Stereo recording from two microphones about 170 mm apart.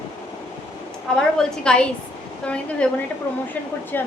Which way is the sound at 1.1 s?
5° left (ahead or behind).